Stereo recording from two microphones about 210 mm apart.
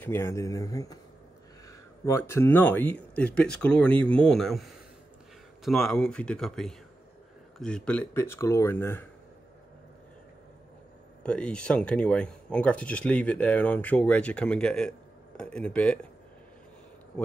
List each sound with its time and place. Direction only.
0.0 s speech: 10° left (ahead or behind)
11.2 s speech: 5° left (ahead or behind)